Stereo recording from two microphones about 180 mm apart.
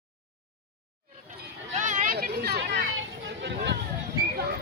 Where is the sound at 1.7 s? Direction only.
45° right (ahead or behind); by 3.7 s 75° right (ahead or behind).